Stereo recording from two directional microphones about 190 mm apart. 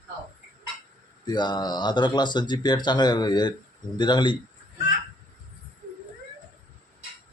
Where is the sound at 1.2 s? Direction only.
25° left (ahead or behind).